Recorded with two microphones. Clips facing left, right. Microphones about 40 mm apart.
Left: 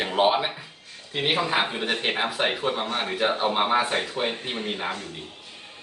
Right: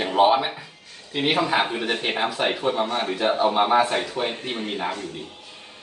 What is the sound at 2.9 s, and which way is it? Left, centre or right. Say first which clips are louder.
Speech: right 2 dB; left.